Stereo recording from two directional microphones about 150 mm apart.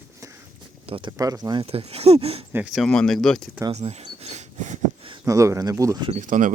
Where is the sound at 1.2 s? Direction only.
25° right (ahead or behind).